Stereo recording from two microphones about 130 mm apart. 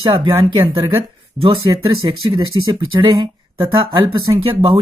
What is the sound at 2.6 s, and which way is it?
Speech, 35° right (ahead or behind).